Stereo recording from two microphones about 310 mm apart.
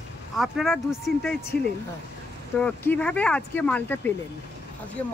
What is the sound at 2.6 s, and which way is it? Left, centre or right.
Speech, centre.